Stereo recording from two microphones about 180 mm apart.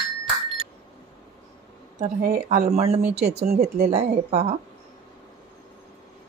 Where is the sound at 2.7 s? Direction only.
35° right (ahead or behind).